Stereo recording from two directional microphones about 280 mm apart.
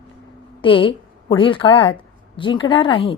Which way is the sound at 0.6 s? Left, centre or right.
Centre.